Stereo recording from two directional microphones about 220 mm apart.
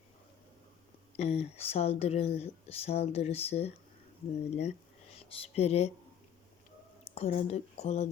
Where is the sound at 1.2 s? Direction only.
25° left (ahead or behind).